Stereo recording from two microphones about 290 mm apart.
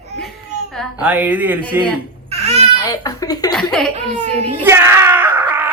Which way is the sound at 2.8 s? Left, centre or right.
Centre.